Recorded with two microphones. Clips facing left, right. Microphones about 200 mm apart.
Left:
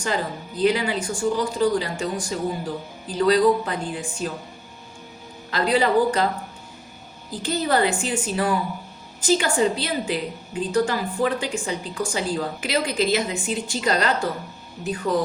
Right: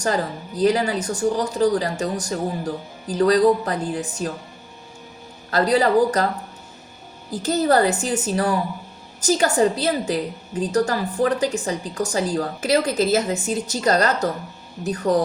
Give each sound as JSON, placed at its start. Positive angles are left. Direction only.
{"t": 0.0, "sound": "a woman's voice", "side_deg": -40}
{"t": 5.5, "sound": "a woman's voice", "side_deg": -40}
{"t": 7.4, "sound": "a woman's voice", "side_deg": -40}